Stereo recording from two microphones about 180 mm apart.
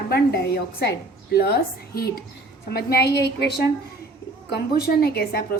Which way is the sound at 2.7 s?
65° left (ahead or behind).